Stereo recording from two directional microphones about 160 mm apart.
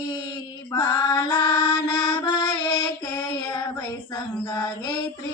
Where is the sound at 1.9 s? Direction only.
25° left (ahead or behind).